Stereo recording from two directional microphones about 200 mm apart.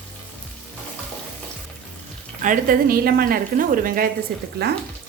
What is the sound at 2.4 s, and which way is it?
Speech, 40° right (ahead or behind).